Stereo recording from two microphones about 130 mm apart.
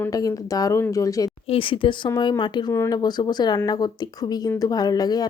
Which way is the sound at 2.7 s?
25° left (ahead or behind).